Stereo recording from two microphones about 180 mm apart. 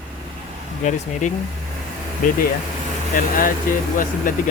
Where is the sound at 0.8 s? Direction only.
40° left (ahead or behind).